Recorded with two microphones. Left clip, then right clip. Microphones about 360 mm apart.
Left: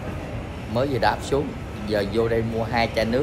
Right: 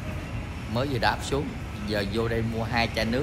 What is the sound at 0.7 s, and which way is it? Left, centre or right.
Speech, centre.